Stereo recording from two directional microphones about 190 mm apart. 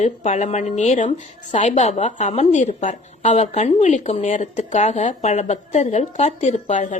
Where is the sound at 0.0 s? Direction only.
40° left (ahead or behind).